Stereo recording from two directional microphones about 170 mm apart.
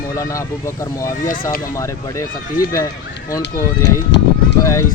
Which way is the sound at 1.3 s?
60° left (ahead or behind).